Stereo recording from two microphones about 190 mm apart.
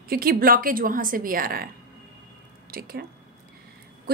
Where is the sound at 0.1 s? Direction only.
50° right (ahead or behind).